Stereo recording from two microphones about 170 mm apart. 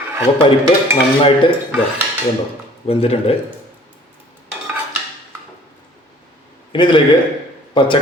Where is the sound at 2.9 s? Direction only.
35° left (ahead or behind).